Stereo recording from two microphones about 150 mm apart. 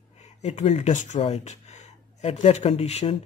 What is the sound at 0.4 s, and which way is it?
Speech, 45° left (ahead or behind).